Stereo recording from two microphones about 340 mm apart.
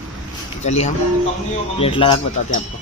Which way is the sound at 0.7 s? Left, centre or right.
Centre.